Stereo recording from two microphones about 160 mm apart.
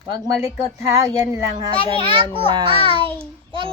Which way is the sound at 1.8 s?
35° right (ahead or behind).